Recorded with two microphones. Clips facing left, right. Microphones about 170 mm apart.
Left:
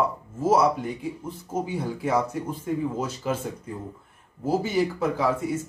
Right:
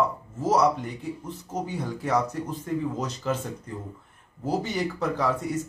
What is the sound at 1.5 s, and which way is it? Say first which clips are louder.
Speech: left 3 dB; 10° left (ahead or behind).